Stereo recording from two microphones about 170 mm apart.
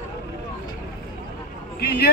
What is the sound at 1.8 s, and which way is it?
Speech, 70° left (ahead or behind).